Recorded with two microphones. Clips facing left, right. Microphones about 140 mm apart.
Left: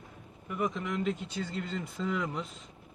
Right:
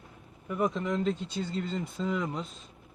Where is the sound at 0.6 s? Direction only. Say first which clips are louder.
Right 4 dB; 35° right (ahead or behind).